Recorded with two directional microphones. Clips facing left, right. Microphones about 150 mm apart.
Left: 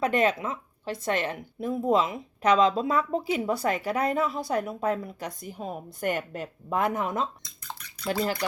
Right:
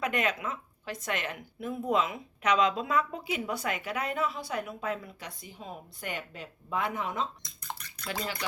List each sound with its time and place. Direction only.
0.0 s a woman's voice: 30° left (ahead or behind)